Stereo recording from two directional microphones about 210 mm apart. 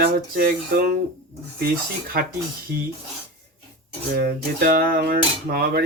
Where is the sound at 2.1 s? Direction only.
45° right (ahead or behind).